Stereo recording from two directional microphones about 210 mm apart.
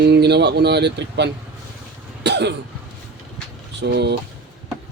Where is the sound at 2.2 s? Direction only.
55° right (ahead or behind).